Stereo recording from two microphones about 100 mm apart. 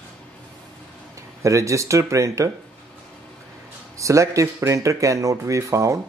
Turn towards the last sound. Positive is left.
turn(degrees=-30)  # may be behind; listen again after turning